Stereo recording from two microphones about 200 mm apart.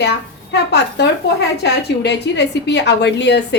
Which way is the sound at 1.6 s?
60° left (ahead or behind).